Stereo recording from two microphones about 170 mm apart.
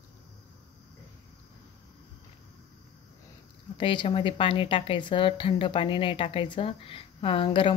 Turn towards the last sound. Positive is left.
turn(degrees=30)  # may be behind; listen again after turning